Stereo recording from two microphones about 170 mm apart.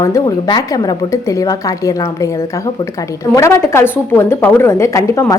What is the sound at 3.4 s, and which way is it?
A woman's voice, 15° left (ahead or behind).